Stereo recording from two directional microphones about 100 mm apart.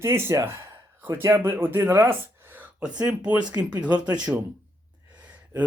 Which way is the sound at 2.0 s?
20° right (ahead or behind).